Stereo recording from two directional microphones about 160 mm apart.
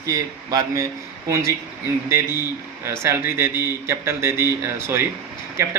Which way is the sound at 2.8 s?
15° right (ahead or behind).